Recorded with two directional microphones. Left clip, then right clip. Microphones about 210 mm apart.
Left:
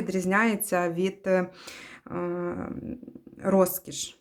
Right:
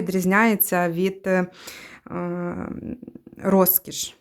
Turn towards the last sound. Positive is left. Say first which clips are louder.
# right 3 dB
turn(degrees=-30)  # may be behind; listen again after turning